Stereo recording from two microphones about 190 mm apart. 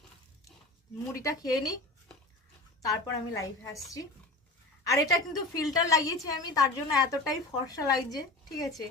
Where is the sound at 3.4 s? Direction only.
15° left (ahead or behind).